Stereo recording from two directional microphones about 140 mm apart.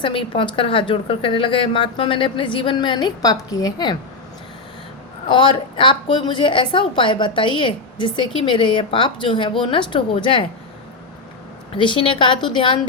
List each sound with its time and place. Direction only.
0.0 s a woman's voice: 40° left (ahead or behind)
5.3 s a woman's voice: 35° left (ahead or behind)
11.7 s a woman's voice: 35° left (ahead or behind)